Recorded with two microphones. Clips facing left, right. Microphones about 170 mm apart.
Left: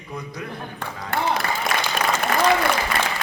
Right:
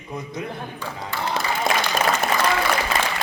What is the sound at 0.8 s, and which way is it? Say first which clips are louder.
Speech: left 6 dB; 60° left (ahead or behind).